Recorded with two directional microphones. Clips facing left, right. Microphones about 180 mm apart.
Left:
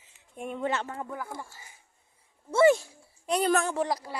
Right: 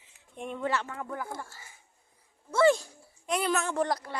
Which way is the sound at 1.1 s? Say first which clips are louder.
Right 1 dB; centre (ahead or behind).